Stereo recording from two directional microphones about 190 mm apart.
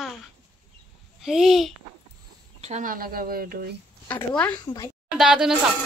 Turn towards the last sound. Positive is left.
turn(degrees=-5)  # may be behind; listen again after turning